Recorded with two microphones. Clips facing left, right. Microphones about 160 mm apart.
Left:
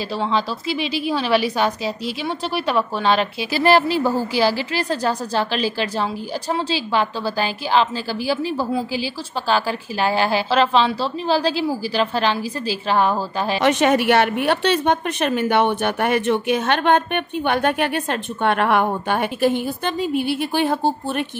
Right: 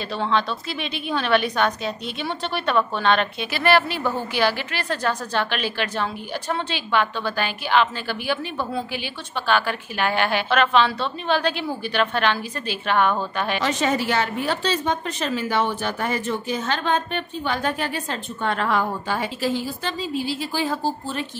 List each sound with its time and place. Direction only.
0.2 s a woman's voice: 5° left (ahead or behind)
3.5 s a woman's voice: 35° left (ahead or behind)
13.6 s a woman's voice: 65° left (ahead or behind)